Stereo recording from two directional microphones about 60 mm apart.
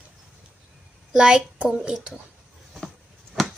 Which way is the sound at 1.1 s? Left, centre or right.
Centre.